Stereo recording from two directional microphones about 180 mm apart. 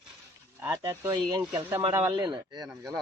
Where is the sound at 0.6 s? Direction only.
15° right (ahead or behind).